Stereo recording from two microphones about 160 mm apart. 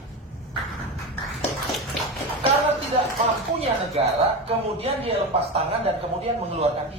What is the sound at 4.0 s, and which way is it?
Speech, 40° right (ahead or behind).